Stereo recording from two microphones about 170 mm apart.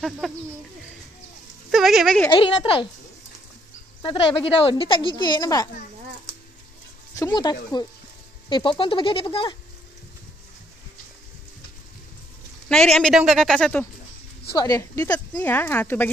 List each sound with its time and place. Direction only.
0.2 s speech: centre (ahead or behind)
1.7 s speech: centre (ahead or behind)
2.3 s speech: 30° left (ahead or behind)
4.0 s speech: 30° left (ahead or behind)
7.2 s speech: 25° left (ahead or behind)
12.6 s speech: 5° left (ahead or behind)
14.6 s speech: 20° left (ahead or behind)